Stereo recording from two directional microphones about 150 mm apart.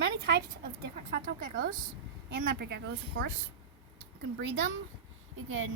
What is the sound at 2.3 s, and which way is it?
Speech, 90° right.